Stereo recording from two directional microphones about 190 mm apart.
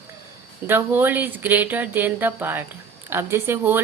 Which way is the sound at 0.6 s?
10° right (ahead or behind).